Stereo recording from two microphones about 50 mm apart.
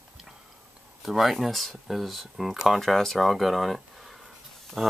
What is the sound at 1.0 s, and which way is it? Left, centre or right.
Speech, centre.